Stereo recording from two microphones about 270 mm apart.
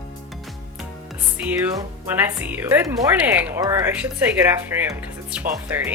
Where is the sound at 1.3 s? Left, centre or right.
Centre.